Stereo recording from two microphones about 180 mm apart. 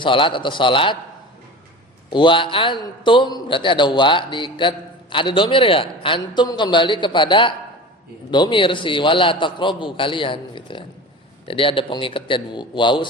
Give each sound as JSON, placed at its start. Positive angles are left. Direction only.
{"t": 0.0, "sound": "a man's voice", "side_deg": 30}
{"t": 2.1, "sound": "a man's voice", "side_deg": 25}